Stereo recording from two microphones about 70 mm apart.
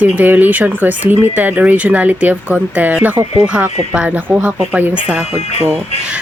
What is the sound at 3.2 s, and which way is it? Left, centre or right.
Speech, right.